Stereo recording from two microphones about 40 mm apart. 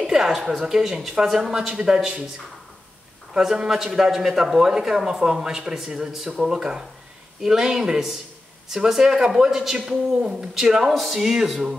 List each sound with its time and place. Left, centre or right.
0.0 s a woman's voice: centre
3.3 s speech: centre
10.9 s speech: centre